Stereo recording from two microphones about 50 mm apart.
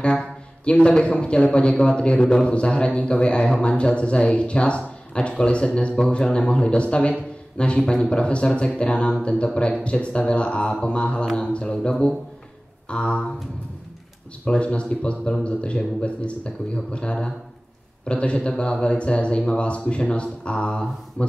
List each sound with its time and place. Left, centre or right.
0.0 s a man's voice: left
14.4 s a man's voice: left